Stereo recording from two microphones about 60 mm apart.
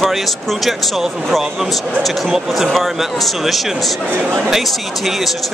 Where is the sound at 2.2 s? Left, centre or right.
Centre.